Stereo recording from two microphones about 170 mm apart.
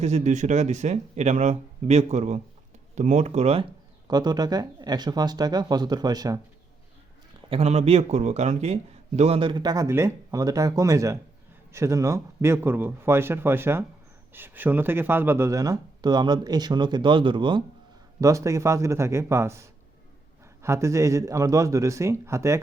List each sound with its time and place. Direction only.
0.0 s speech: 45° right (ahead or behind)
4.1 s speech: 25° right (ahead or behind)
7.5 s a man's voice: 40° right (ahead or behind)
18.2 s a man's voice: 20° right (ahead or behind)